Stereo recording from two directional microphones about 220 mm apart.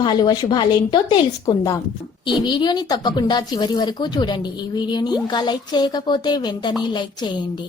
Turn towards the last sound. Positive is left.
turn(degrees=20)  # may be behind; listen again after turning